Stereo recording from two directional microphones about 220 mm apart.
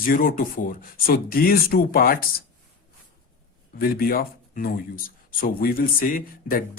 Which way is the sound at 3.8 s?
45° left (ahead or behind).